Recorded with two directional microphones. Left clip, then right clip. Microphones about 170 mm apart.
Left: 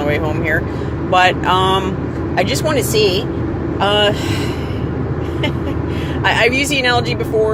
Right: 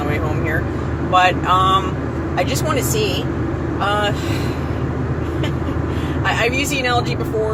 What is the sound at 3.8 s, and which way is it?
Speech, 45° left (ahead or behind).